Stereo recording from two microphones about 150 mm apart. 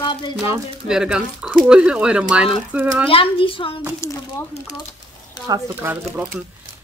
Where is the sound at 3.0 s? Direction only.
40° left (ahead or behind).